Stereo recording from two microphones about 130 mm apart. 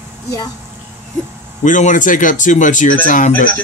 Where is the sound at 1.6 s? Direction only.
80° left.